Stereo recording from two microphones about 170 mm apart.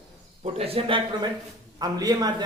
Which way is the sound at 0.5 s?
35° right (ahead or behind).